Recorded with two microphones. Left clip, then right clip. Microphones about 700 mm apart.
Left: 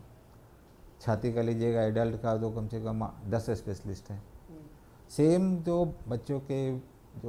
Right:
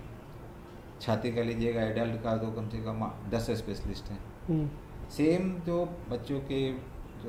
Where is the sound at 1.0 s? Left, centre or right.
Left.